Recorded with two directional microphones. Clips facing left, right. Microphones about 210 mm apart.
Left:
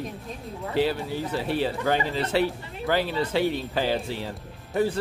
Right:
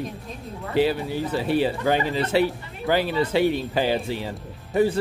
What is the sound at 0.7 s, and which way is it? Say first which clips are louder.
Speech: right 3 dB; 10° right (ahead or behind).